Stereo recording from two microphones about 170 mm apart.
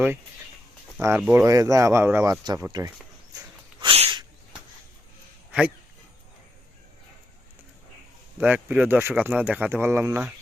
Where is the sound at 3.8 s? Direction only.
30° right (ahead or behind).